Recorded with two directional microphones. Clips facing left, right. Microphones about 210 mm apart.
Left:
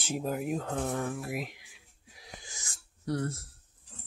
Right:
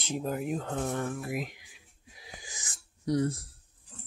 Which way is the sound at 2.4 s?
20° right (ahead or behind).